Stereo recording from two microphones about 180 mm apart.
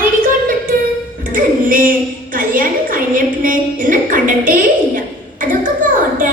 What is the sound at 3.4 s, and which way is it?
A woman's voice, 50° right (ahead or behind).